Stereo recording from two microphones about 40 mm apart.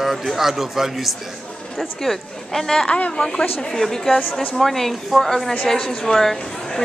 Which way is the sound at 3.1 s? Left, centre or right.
Left.